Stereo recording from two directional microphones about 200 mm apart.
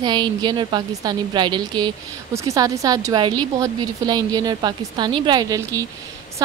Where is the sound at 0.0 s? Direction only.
20° right (ahead or behind).